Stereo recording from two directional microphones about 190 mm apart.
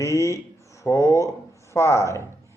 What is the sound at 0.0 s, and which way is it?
Speech, 15° left (ahead or behind).